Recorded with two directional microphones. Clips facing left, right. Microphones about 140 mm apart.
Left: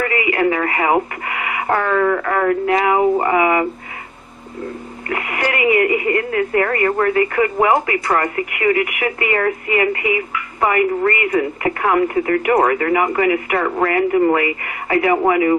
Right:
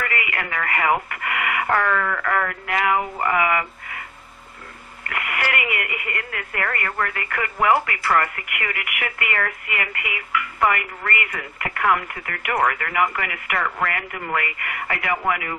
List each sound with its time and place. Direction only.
0.0 s radio: 30° left (ahead or behind)
1.2 s speech: 25° left (ahead or behind)
5.0 s speech: 30° left (ahead or behind)